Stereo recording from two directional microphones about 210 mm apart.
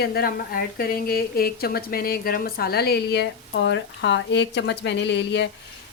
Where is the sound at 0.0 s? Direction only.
45° left (ahead or behind).